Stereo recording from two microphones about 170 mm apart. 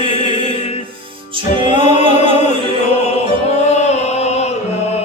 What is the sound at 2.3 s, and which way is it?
Music, 40° left (ahead or behind).